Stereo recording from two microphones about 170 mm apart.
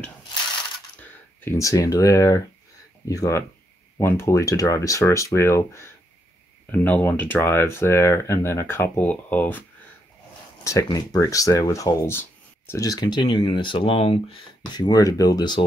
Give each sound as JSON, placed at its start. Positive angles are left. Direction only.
{"t": 1.4, "sound": "speech", "side_deg": 15}